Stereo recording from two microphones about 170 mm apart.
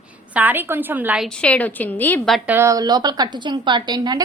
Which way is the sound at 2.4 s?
15° right (ahead or behind).